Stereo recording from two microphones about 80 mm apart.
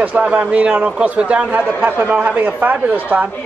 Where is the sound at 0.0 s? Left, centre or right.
Centre.